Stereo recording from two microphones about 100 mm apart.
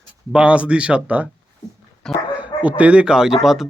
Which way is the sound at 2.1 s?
5° left (ahead or behind).